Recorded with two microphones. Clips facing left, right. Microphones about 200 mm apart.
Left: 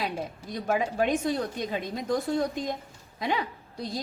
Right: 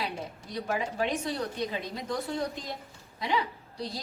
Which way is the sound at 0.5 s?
45° left (ahead or behind).